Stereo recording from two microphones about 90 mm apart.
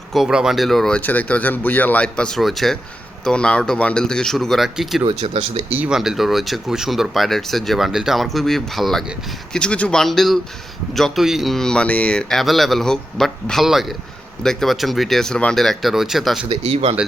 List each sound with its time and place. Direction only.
0.1 s speech: 5° right (ahead or behind)
5.0 s speech: 90° right
5.9 s speech: 5° right (ahead or behind); by 10.0 s 15° left (ahead or behind)
10.0 s speech: centre (ahead or behind)
16.5 s speech: 90° right